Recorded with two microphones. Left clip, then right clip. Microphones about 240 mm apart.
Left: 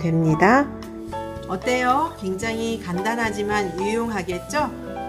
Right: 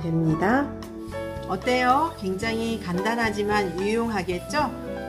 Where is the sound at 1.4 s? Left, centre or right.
Centre.